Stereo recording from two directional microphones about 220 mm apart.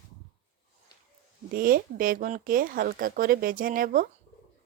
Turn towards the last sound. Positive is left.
turn(degrees=-40)  # may be behind; listen again after turning